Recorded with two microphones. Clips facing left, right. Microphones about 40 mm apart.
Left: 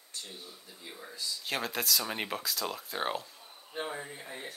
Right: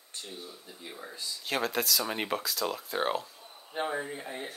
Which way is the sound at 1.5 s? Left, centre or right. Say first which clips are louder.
Right 3 dB; centre.